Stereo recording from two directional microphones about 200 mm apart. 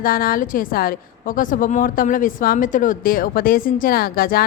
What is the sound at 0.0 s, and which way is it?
A woman's voice, 45° left (ahead or behind).